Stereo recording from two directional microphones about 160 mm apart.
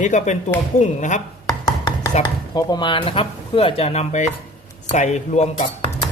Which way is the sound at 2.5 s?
30° left (ahead or behind).